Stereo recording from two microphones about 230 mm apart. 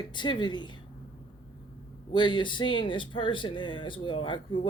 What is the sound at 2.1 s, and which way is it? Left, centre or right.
Speech, centre.